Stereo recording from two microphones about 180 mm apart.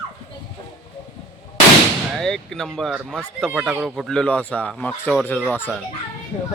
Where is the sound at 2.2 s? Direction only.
5° left (ahead or behind).